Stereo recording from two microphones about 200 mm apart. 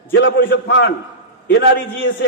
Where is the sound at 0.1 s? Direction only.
70° left (ahead or behind).